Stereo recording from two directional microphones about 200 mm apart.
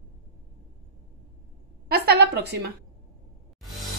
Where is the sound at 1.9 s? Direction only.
55° right (ahead or behind).